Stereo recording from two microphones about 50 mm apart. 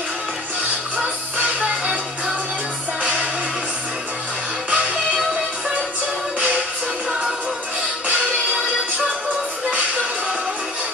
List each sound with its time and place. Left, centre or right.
0.9 s music: right
4.6 s music: right